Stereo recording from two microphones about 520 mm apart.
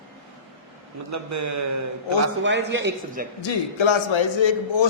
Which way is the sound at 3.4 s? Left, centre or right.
Left.